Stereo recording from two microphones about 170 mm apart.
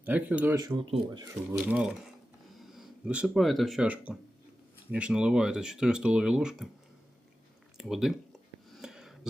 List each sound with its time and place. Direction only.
0.0 s speech: 10° right (ahead or behind)
0.9 s speech: 30° right (ahead or behind)
1.3 s speech: 10° right (ahead or behind)
7.8 s speech: centre (ahead or behind)
8.7 s a sound: 5° right (ahead or behind)